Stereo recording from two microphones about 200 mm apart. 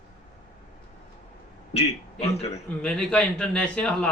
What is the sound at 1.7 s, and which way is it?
Speech, 30° left (ahead or behind).